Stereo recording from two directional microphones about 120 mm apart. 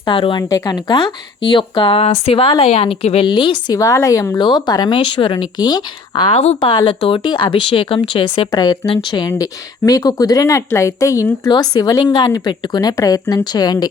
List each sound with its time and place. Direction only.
0.0 s speech: 45° left (ahead or behind)
0.4 s speech: 30° left (ahead or behind); by 3.2 s 55° left (ahead or behind)
3.2 s a woman's voice: 40° left (ahead or behind); by 6.6 s 60° left (ahead or behind)
6.6 s a woman's voice: 45° left (ahead or behind)